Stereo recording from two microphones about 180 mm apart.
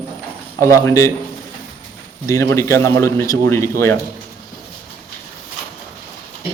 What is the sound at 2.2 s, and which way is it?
A man's voice, 15° left (ahead or behind).